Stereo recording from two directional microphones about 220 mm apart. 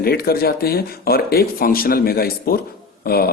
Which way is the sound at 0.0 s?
45° left (ahead or behind).